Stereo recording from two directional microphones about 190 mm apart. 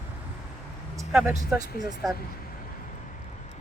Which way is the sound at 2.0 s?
Centre (ahead or behind).